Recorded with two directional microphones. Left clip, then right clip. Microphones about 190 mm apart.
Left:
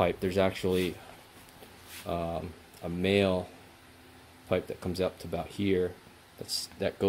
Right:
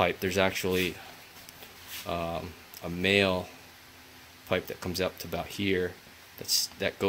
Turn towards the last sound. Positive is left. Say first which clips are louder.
# right 4 dB
turn(degrees=10)  # may be behind; listen again after turning